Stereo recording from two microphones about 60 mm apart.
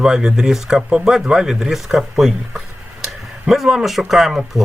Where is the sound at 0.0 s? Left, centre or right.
Centre.